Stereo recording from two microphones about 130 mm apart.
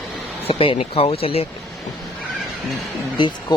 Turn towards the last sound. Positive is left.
turn(degrees=40)  # may be behind; listen again after turning